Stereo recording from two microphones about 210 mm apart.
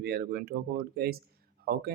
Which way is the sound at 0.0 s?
45° right (ahead or behind).